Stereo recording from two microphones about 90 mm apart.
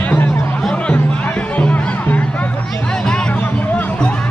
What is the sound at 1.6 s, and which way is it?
Music, 15° left (ahead or behind).